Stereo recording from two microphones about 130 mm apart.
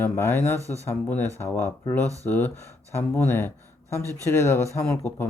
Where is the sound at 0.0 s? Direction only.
15° left (ahead or behind).